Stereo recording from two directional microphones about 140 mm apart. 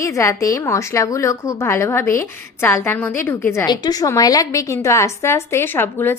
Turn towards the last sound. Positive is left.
turn(degrees=15)  # may be behind; listen again after turning